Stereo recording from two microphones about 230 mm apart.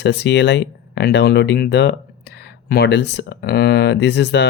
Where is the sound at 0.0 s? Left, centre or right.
Left.